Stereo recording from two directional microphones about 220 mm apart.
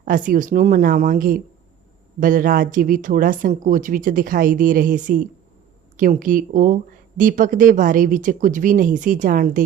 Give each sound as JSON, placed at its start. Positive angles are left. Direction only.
{"t": 0.3, "sound": "speech", "side_deg": -35}